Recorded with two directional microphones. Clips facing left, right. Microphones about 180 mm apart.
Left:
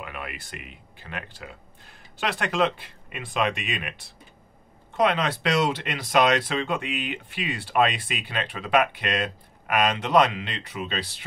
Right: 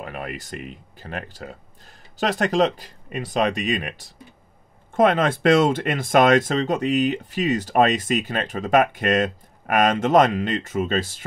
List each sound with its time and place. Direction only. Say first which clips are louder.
0.0 s speech: right 5 dB; 40° right (ahead or behind)